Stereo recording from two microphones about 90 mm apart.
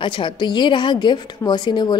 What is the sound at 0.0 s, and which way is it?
A woman's voice, 65° left (ahead or behind).